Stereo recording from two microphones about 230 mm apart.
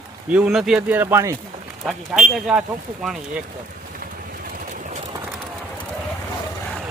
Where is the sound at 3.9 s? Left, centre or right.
Right.